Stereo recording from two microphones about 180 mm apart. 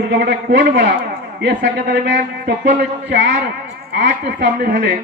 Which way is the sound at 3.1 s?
60° right (ahead or behind).